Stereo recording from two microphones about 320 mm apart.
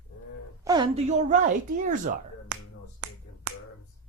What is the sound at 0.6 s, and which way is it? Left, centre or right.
Speech, centre.